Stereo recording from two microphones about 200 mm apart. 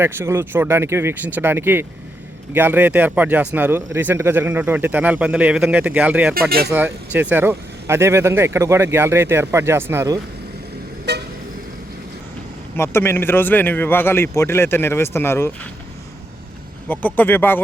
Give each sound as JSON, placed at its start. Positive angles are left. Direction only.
{"t": 0.0, "sound": "speech", "side_deg": -10}
{"t": 11.1, "sound": "vehicle", "side_deg": -55}
{"t": 12.7, "sound": "speech", "side_deg": 10}
{"t": 17.2, "sound": "speech", "side_deg": 10}